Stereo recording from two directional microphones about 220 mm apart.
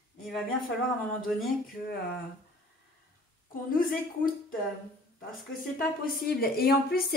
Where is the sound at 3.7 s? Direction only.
40° left (ahead or behind).